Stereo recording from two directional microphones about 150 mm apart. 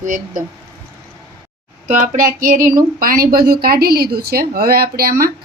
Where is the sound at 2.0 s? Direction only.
65° right (ahead or behind).